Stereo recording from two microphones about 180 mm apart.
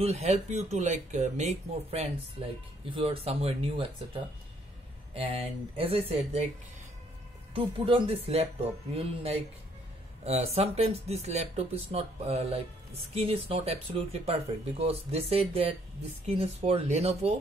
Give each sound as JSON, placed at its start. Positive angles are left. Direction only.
{"t": 0.0, "sound": "speech", "side_deg": -35}
{"t": 7.5, "sound": "speech", "side_deg": -30}